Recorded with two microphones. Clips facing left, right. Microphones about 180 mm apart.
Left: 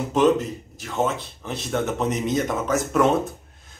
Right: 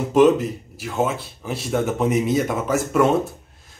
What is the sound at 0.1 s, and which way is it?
Speech, 5° right (ahead or behind).